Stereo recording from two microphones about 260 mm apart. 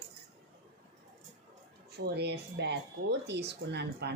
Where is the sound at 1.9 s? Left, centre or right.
Right.